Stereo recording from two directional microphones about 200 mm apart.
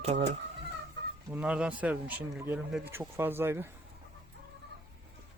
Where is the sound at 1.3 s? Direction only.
5° right (ahead or behind).